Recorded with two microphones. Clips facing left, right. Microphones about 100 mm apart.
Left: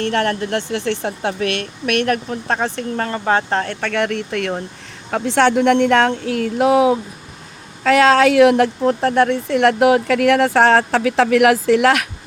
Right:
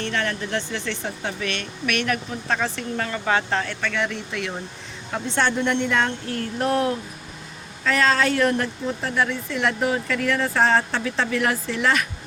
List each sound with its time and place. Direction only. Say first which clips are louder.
0.0 s speech: left 7 dB; 55° left (ahead or behind)
5.1 s speech: left 8 dB; 90° left
7.9 s speech: left 8 dB; 75° left (ahead or behind)